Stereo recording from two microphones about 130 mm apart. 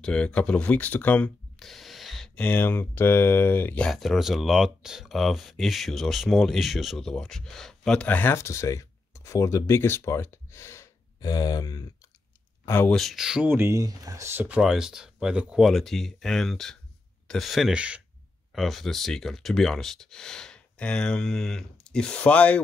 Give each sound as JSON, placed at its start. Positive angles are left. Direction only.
{"t": 0.0, "sound": "speech", "side_deg": 5}
{"t": 1.6, "sound": "speech", "side_deg": 0}
{"t": 12.6, "sound": "speech", "side_deg": 15}
{"t": 12.9, "sound": "speech", "side_deg": 0}
{"t": 13.5, "sound": "speech", "side_deg": -20}
{"t": 14.6, "sound": "speech", "side_deg": -5}